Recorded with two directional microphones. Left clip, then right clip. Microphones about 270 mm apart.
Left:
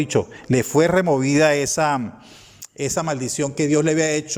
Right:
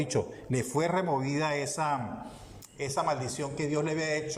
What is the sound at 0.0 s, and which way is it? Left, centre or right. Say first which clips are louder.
A man's voice: left 10 dB; left.